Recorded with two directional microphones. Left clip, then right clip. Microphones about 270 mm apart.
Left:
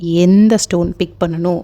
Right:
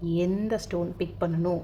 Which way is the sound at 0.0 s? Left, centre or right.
Left.